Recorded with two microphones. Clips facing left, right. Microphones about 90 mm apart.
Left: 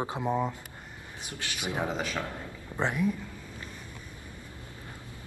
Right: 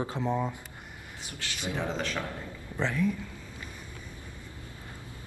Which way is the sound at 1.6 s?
15° left (ahead or behind).